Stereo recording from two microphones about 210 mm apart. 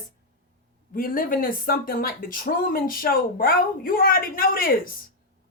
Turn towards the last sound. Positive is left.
turn(degrees=45)  # may be behind; listen again after turning